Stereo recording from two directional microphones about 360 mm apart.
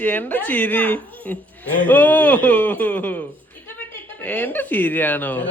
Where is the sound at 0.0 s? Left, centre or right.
Centre.